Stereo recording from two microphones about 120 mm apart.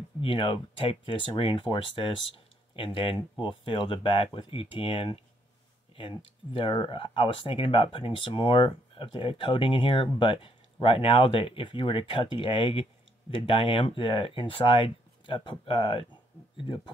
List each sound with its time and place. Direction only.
0.2 s speech: 45° left (ahead or behind)